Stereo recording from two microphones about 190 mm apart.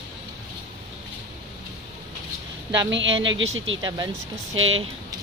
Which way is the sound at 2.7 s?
70° right (ahead or behind).